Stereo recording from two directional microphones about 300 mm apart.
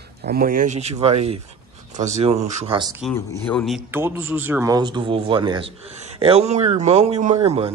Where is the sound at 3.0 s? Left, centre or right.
Centre.